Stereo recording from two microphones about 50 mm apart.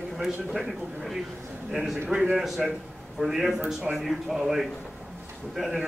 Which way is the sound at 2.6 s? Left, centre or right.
Centre.